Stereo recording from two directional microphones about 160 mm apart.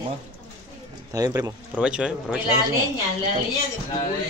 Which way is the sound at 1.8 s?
5° right (ahead or behind).